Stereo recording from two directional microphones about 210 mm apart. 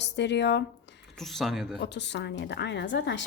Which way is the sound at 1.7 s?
55° left (ahead or behind).